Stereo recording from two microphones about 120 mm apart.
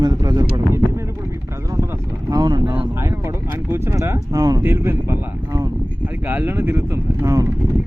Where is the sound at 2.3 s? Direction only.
35° right (ahead or behind).